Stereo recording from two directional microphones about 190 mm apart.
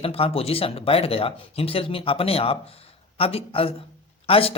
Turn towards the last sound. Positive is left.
turn(degrees=30)  # may be behind; listen again after turning